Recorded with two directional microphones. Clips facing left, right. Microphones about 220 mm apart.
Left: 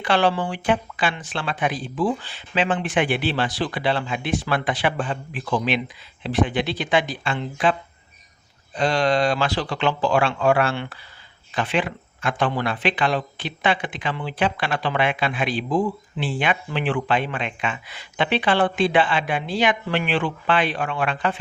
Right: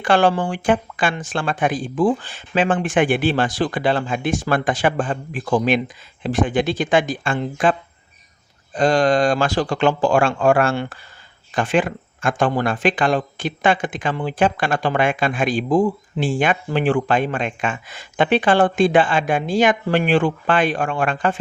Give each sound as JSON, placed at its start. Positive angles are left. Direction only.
{"t": 0.0, "sound": "a man's voice", "side_deg": -50}